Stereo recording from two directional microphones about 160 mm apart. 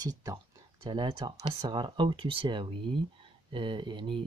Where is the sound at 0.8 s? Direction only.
25° right (ahead or behind).